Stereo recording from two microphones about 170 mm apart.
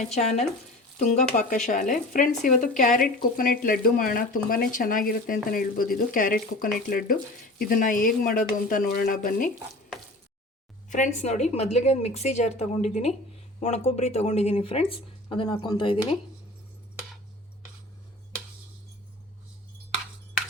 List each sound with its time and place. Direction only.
0.0 s speech: 40° left (ahead or behind)
10.8 s speech: 45° left (ahead or behind); by 16.0 s 25° left (ahead or behind)